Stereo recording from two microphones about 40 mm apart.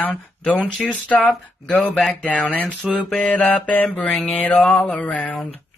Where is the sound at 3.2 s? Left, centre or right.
Left.